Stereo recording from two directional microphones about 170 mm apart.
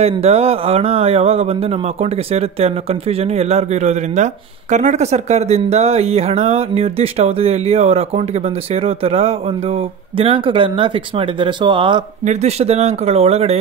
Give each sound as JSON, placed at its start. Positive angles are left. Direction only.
{"t": 0.0, "sound": "speech", "side_deg": -35}
{"t": 12.3, "sound": "speech", "side_deg": -40}